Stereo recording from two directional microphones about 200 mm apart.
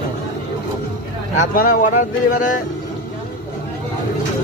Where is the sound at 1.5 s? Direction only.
45° left (ahead or behind).